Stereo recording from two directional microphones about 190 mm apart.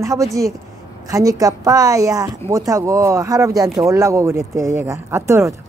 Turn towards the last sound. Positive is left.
turn(degrees=-15)  # may be behind; listen again after turning